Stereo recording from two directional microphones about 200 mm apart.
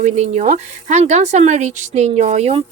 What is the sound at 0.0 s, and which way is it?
Speech, 35° right (ahead or behind).